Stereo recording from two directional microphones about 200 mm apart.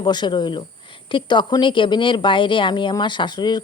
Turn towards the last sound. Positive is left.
turn(degrees=20)  # may be behind; listen again after turning